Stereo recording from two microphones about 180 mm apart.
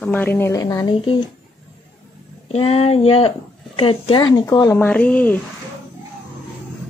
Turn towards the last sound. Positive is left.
turn(degrees=10)  # may be behind; listen again after turning